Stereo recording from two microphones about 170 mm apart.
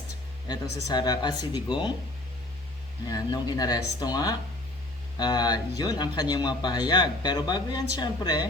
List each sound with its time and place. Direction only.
0.4 s speech: 20° left (ahead or behind)
3.1 s speech: 20° left (ahead or behind)